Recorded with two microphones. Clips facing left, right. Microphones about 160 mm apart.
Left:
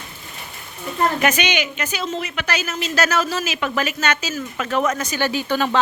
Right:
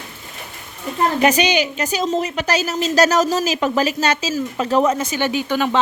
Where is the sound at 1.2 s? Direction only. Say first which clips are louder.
Right 4 dB; 35° right (ahead or behind); by 5.8 s 15° right (ahead or behind).